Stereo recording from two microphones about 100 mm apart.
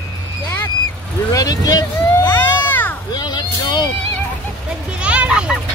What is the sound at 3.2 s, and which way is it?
Vehicle, 45° left (ahead or behind).